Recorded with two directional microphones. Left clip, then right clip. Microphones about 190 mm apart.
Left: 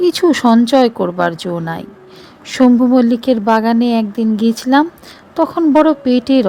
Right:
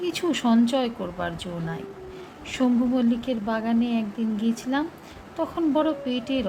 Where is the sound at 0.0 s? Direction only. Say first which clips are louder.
Left 14 dB; 50° left (ahead or behind).